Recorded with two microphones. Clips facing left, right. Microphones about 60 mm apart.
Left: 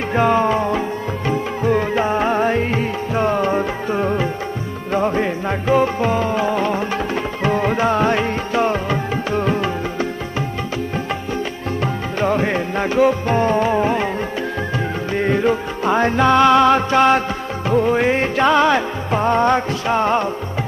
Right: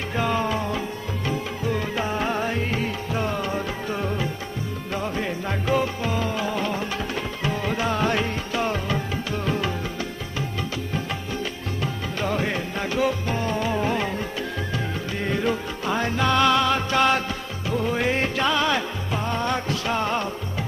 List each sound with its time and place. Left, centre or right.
0.1 s music: left
11.8 s music: left
15.1 s music: left